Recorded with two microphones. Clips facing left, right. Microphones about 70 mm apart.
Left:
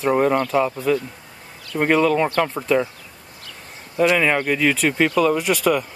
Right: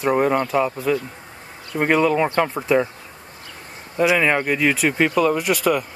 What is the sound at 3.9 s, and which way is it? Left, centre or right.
Speech, centre.